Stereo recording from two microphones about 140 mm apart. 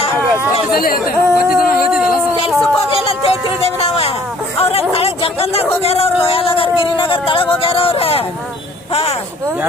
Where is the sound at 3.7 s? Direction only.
45° left (ahead or behind).